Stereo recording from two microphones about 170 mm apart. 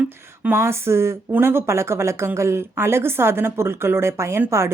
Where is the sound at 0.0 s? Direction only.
10° right (ahead or behind).